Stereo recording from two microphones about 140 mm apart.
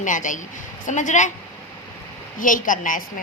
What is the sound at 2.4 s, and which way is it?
Speech, 70° left (ahead or behind).